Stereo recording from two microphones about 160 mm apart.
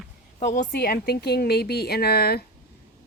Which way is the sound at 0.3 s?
50° left (ahead or behind).